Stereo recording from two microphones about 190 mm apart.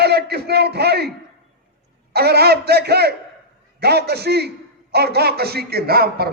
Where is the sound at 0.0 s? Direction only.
60° right (ahead or behind).